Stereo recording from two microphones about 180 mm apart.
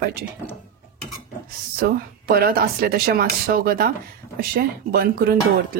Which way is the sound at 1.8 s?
55° right (ahead or behind).